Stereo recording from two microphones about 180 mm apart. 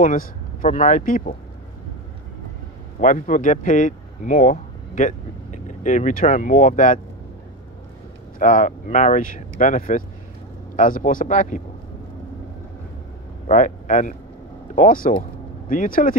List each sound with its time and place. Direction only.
0.0 s speech: 50° left (ahead or behind)
3.0 s speech: 45° left (ahead or behind)
8.4 s speech: 45° left (ahead or behind)
13.5 s speech: 45° left (ahead or behind)